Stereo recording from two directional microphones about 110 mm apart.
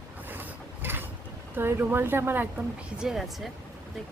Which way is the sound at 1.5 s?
20° right (ahead or behind).